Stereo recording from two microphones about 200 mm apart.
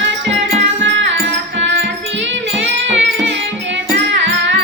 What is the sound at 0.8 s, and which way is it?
Music, 65° right (ahead or behind).